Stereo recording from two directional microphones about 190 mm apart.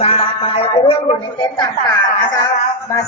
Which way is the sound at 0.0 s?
30° left (ahead or behind).